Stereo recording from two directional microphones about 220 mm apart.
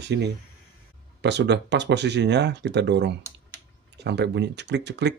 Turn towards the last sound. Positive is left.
turn(degrees=-50)  # may be behind; listen again after turning